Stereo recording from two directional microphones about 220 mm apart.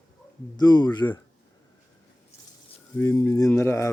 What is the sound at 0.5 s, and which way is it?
Speech, 20° left (ahead or behind).